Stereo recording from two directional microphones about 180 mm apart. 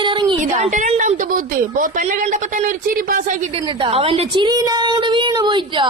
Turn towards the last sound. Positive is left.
turn(degrees=-25)  # may be behind; listen again after turning